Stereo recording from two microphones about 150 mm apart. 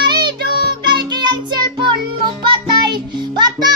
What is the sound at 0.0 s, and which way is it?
Music, 30° right (ahead or behind).